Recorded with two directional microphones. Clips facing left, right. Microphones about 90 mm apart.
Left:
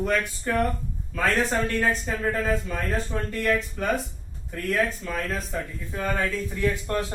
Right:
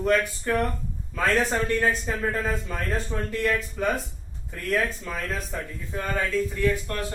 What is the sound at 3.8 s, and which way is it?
Speech, 5° right (ahead or behind).